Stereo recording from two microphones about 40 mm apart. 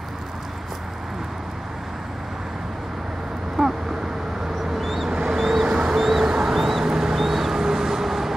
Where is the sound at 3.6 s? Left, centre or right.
Centre.